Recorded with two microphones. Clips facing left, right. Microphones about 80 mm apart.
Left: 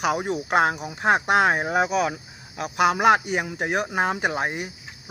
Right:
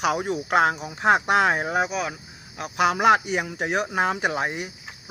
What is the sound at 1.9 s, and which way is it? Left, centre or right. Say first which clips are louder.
Speech: left 5 dB; left.